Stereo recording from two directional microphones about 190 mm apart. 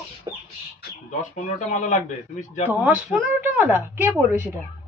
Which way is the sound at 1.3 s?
40° left (ahead or behind).